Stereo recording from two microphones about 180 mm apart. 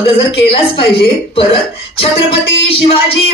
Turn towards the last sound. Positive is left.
turn(degrees=30)  # may be behind; listen again after turning